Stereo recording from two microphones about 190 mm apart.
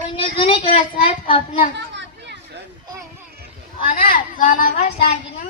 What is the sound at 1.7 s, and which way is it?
Children playing, 65° right (ahead or behind).